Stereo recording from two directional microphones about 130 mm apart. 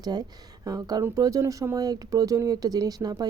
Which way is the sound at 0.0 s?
30° right (ahead or behind).